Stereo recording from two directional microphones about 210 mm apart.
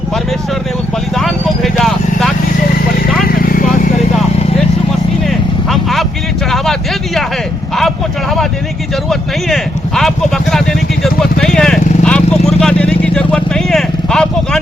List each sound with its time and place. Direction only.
1.1 s a sound: centre (ahead or behind)
3.2 s vehicle: 45° left (ahead or behind)
5.7 s vehicle: centre (ahead or behind)
7.8 s a sound: centre (ahead or behind)
9.0 s speech: centre (ahead or behind)
10.5 s vehicle: centre (ahead or behind)